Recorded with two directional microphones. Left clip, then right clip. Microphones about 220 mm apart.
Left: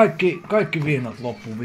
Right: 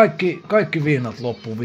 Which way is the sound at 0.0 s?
30° right (ahead or behind).